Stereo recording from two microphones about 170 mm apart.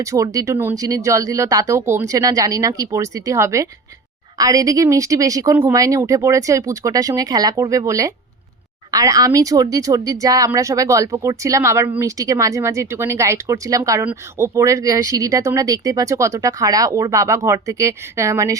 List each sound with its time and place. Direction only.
0.0 s speech: 20° right (ahead or behind)